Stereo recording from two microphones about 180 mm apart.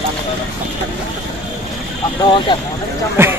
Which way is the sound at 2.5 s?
25° left (ahead or behind).